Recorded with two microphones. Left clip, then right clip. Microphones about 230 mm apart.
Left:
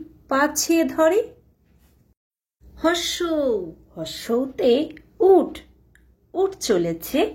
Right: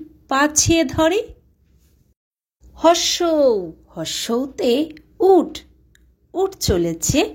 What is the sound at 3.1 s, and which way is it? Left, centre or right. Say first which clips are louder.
A woman's voice: right 6 dB; right.